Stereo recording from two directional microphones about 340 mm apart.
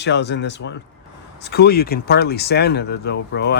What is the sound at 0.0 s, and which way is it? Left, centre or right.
Speech, left.